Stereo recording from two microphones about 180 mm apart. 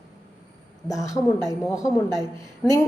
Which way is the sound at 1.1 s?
20° left (ahead or behind).